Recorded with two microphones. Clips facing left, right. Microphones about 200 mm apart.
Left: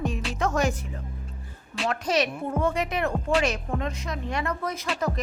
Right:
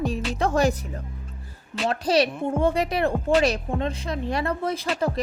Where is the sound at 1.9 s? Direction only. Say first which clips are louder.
Right 4 dB; 35° right (ahead or behind).